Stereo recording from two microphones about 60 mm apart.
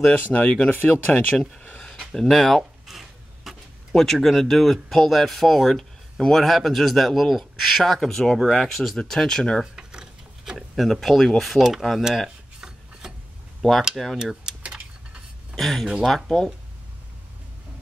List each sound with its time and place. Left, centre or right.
0.3 s speech: centre
0.7 s speech: left
2.1 s a sound: centre
4.0 s speech: centre
9.8 s gears: centre
10.8 s speech: centre
12.5 s filing: centre
13.6 s speech: centre
14.1 s speech: centre
15.5 s speech: centre